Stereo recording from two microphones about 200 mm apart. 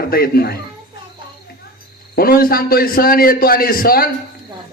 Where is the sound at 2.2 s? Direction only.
50° left (ahead or behind).